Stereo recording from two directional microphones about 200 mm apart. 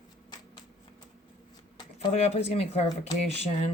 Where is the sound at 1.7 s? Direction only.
35° left (ahead or behind).